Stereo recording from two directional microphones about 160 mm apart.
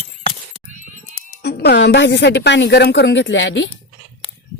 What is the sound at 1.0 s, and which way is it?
Speech, 65° left (ahead or behind).